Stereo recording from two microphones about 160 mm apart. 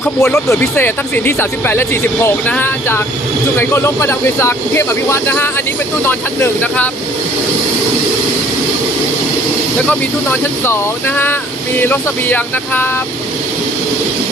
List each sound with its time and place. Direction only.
0.0 s speech: 15° left (ahead or behind)
11.8 s speech: 10° left (ahead or behind)